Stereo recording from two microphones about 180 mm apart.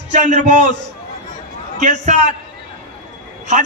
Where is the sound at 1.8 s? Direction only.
40° right (ahead or behind).